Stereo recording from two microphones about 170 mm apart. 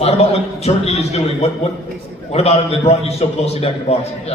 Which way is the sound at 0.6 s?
40° left (ahead or behind).